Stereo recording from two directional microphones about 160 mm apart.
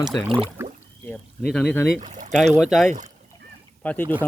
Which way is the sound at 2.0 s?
50° right (ahead or behind).